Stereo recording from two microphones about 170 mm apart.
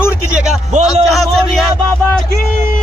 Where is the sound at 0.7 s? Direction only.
45° right (ahead or behind).